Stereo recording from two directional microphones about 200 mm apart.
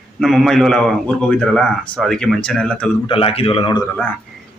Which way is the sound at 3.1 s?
30° left (ahead or behind).